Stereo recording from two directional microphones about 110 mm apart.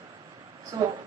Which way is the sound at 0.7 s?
30° right (ahead or behind).